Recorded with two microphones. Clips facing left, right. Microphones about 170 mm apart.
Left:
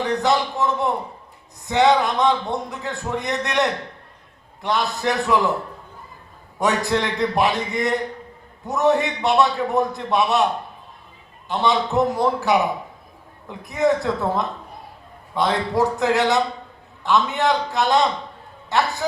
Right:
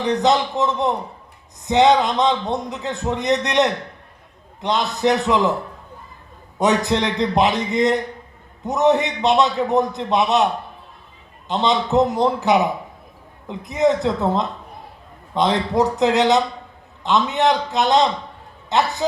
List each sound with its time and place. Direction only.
0.0 s a man's voice: 20° right (ahead or behind)
6.6 s a man's voice: 20° right (ahead or behind)
11.4 s a man's voice: 20° right (ahead or behind)